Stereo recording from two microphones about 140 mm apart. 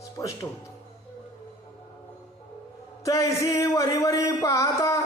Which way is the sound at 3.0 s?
25° left (ahead or behind).